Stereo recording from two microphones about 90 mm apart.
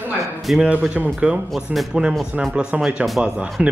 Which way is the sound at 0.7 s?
15° right (ahead or behind).